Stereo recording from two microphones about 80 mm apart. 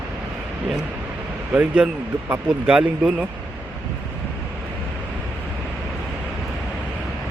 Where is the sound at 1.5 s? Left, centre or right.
Centre.